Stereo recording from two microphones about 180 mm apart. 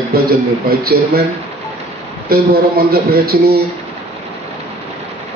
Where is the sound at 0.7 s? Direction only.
60° right (ahead or behind).